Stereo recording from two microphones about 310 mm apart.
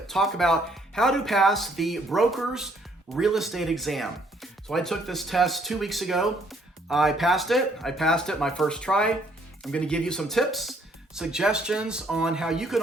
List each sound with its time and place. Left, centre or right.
0.1 s speech: centre